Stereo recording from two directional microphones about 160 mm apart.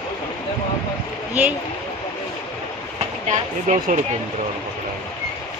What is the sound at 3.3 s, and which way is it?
Speech, 50° right (ahead or behind).